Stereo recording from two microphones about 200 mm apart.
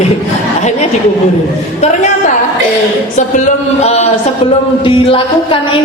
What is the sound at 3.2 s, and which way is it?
Speech, 40° left (ahead or behind).